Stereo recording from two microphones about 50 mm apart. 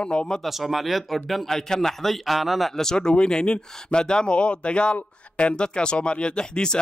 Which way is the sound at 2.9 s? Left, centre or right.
Centre.